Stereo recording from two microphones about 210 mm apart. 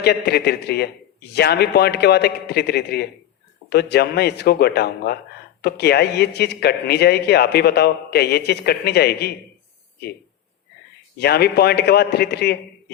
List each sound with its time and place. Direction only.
0.0 s speech: 50° left (ahead or behind)
11.2 s speech: 50° left (ahead or behind)